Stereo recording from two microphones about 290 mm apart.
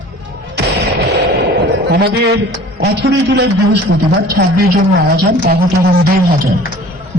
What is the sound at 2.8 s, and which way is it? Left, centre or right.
A woman's voice, right.